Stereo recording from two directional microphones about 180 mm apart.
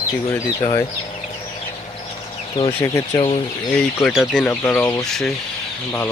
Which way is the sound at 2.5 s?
25° left (ahead or behind).